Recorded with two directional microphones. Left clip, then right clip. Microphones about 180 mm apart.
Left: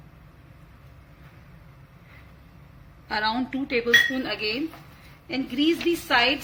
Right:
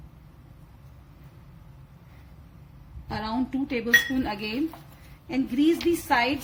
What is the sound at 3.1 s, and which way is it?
Speech, 35° right (ahead or behind).